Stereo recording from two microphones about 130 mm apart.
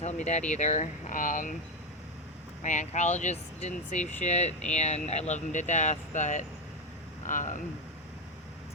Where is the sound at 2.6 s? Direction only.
70° left (ahead or behind).